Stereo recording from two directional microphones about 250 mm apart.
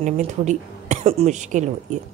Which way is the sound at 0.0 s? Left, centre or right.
Right.